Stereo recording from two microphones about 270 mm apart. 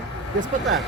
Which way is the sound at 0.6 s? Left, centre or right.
Centre.